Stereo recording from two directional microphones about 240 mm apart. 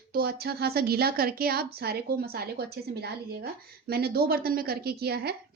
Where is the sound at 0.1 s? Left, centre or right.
Right.